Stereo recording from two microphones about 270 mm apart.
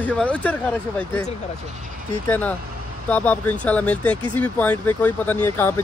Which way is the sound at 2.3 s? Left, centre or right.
Centre.